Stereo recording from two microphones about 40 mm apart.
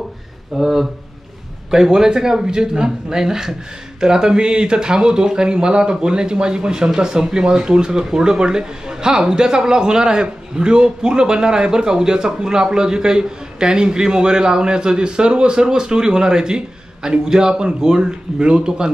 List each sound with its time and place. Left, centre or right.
0.6 s speech: centre